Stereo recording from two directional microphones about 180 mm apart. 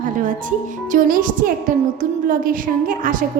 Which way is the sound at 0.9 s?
50° right (ahead or behind).